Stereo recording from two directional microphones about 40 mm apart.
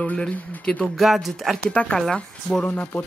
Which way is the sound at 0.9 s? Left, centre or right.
Centre.